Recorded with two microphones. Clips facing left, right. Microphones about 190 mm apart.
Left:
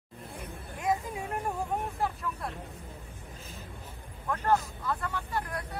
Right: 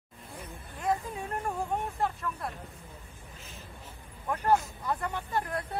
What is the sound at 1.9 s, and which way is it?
Vehicle, centre (ahead or behind).